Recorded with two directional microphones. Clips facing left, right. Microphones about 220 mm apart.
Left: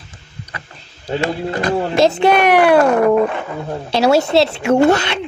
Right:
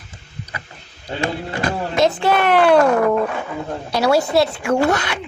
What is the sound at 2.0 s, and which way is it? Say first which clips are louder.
Speech: left 3 dB; 25° left (ahead or behind).